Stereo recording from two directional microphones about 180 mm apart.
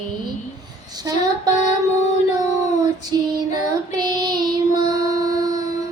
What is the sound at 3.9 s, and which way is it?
Child singing, 25° right (ahead or behind).